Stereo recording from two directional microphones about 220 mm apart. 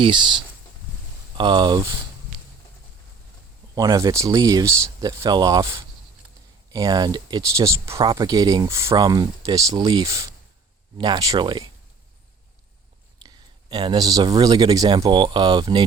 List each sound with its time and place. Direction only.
0.0 s speech: 20° right (ahead or behind)
1.4 s speech: 20° right (ahead or behind)
3.8 s speech: 15° right (ahead or behind)
13.2 s speech: 20° right (ahead or behind)